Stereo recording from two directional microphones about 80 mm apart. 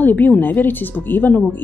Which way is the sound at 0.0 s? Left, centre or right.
Left.